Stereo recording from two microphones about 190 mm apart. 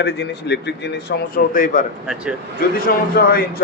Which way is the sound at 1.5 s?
45° left (ahead or behind).